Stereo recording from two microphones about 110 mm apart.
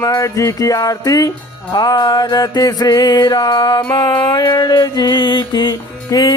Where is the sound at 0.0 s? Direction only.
30° left (ahead or behind).